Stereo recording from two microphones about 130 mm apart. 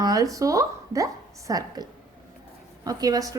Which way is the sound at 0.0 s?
25° right (ahead or behind).